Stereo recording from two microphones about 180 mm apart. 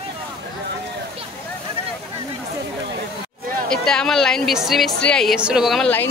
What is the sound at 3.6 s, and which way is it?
Speech, 5° left (ahead or behind).